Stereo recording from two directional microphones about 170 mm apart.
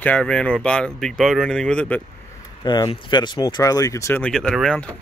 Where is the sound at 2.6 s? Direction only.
25° left (ahead or behind).